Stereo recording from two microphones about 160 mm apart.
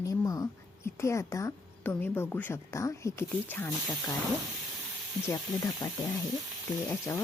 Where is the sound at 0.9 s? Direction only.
15° left (ahead or behind).